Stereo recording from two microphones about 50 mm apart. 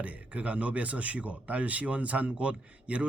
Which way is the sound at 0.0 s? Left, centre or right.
Right.